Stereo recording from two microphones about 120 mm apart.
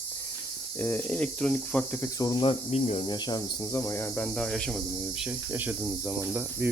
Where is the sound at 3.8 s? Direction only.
20° left (ahead or behind); by 4.7 s 5° left (ahead or behind).